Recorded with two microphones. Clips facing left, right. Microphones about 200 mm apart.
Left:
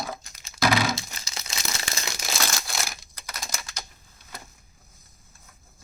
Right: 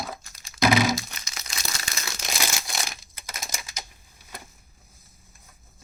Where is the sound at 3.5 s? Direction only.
10° right (ahead or behind).